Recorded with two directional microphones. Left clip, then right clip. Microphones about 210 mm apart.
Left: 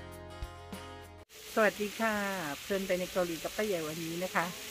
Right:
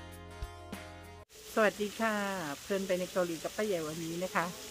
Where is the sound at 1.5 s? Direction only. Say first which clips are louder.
Left 1 dB; centre (ahead or behind).